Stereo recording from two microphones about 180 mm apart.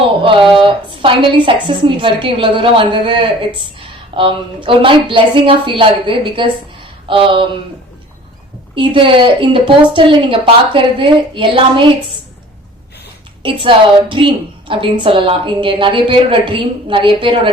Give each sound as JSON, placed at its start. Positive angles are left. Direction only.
{"t": 0.2, "sound": "a woman's voice", "side_deg": -30}
{"t": 8.7, "sound": "a woman's voice", "side_deg": -30}
{"t": 13.4, "sound": "a woman's voice", "side_deg": -30}